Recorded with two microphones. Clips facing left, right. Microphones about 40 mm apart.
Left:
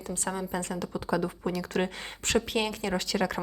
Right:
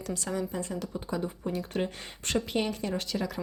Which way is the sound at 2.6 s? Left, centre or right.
Left.